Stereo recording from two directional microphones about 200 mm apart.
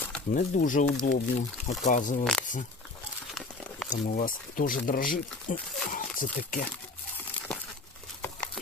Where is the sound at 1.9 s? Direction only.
40° left (ahead or behind).